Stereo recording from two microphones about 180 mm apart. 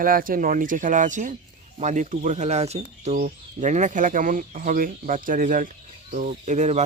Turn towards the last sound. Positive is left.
turn(degrees=-40)  # may be behind; listen again after turning